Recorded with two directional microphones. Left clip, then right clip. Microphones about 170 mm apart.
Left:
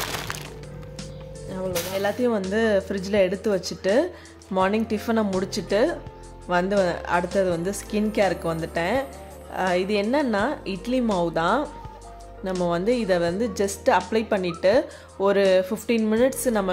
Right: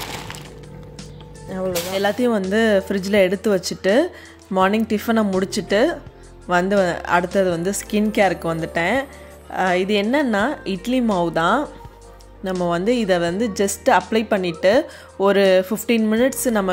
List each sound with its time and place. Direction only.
1.5 s speech: 25° right (ahead or behind)
12.6 s speech: 25° right (ahead or behind)